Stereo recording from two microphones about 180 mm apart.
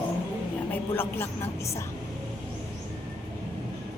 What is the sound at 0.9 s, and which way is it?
Speech, 15° left (ahead or behind).